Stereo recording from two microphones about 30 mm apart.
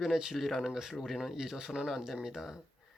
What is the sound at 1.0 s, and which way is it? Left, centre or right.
Speech, centre.